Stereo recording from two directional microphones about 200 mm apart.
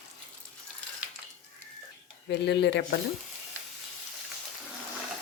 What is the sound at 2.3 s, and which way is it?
Speech, 60° left (ahead or behind).